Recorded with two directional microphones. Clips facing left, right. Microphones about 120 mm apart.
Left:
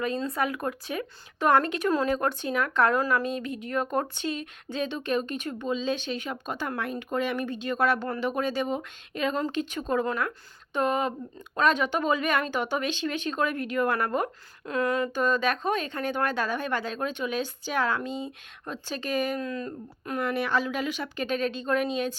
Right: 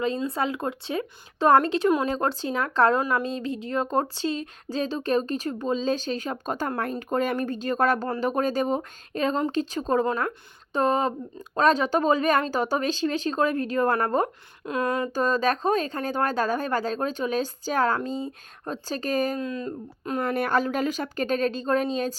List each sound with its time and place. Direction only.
0.3 s speech: 25° right (ahead or behind)
15.1 s speech: 35° right (ahead or behind)
19.4 s speech: 25° right (ahead or behind)
20.2 s speech: 50° right (ahead or behind)